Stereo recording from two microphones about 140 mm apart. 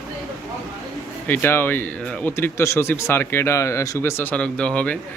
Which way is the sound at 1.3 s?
15° left (ahead or behind).